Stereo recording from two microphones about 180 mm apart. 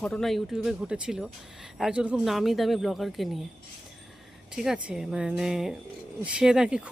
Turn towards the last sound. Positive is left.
turn(degrees=-5)  # may be behind; listen again after turning